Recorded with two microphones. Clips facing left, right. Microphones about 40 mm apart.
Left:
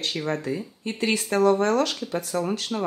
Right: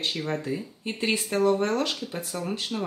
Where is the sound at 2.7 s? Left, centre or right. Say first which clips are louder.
Left 3 dB; left.